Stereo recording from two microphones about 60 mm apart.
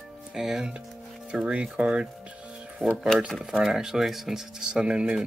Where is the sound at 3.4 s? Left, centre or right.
Centre.